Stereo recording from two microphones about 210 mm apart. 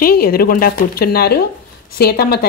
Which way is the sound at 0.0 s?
45° left (ahead or behind).